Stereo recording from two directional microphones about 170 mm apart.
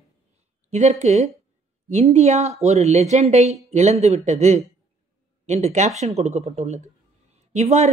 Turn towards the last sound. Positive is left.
turn(degrees=-45)  # may be behind; listen again after turning